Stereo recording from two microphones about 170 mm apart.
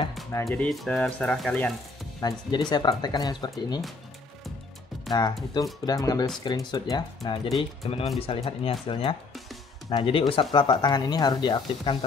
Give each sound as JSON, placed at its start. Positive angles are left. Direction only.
{"t": 0.5, "sound": "speech", "side_deg": 0}
{"t": 2.1, "sound": "speech", "side_deg": 25}
{"t": 5.1, "sound": "speech", "side_deg": 25}
{"t": 7.4, "sound": "speech", "side_deg": 0}
{"t": 8.2, "sound": "speech", "side_deg": 35}